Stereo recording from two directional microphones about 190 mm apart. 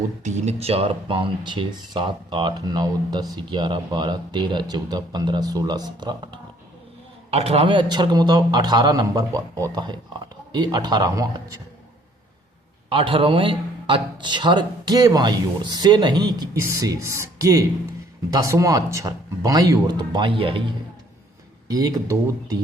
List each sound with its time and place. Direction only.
0.2 s speech: 40° right (ahead or behind); by 11.6 s 20° right (ahead or behind)
12.9 s speech: 25° right (ahead or behind)